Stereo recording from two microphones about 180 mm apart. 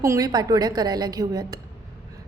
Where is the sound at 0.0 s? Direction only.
20° right (ahead or behind).